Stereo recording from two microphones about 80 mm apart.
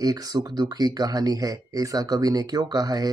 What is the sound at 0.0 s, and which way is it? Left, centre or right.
Speech, right.